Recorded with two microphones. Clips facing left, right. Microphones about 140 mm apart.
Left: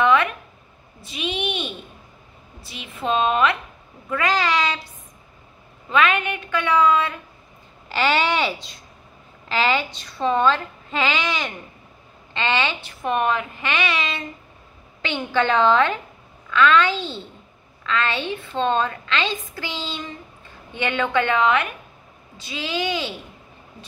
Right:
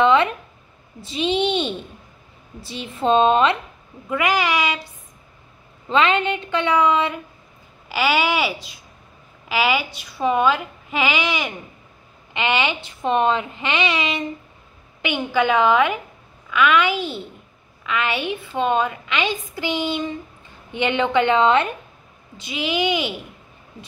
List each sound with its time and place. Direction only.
0.0 s a sound: 25° right (ahead or behind)
1.0 s a woman's voice: 30° right (ahead or behind)
4.1 s a woman's voice: 15° right (ahead or behind)
5.9 s a woman's voice: 25° right (ahead or behind)
7.9 s a woman's voice: 5° right (ahead or behind); by 21.6 s 25° right (ahead or behind)
22.4 s a woman's voice: 15° right (ahead or behind)